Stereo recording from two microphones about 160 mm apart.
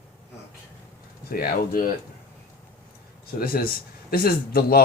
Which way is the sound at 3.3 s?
65° left (ahead or behind).